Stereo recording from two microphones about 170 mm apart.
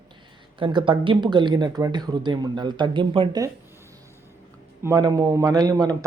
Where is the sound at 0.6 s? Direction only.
30° right (ahead or behind).